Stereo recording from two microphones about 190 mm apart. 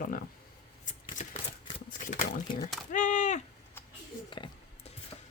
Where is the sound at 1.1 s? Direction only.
40° left (ahead or behind).